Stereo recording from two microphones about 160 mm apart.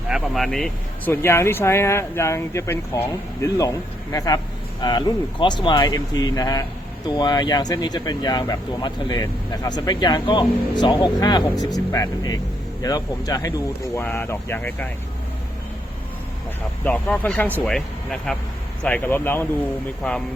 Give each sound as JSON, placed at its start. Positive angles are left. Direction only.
{"t": 0.1, "sound": "speech", "side_deg": 0}
{"t": 1.1, "sound": "speech", "side_deg": 15}
{"t": 16.8, "sound": "speech", "side_deg": 10}